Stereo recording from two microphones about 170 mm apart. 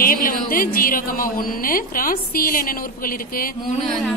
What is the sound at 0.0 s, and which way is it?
A woman's voice, 55° left (ahead or behind).